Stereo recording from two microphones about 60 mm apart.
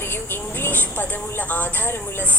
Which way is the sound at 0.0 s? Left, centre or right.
Left.